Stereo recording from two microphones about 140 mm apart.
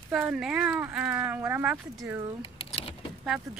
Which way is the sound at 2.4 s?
45° left (ahead or behind).